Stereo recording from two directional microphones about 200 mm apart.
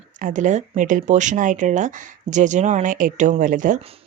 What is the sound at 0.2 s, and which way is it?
Speech, 40° right (ahead or behind).